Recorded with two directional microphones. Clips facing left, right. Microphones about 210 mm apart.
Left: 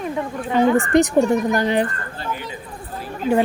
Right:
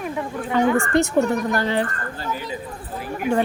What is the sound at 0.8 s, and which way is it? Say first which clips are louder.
Speech: left 3 dB; 15° left (ahead or behind).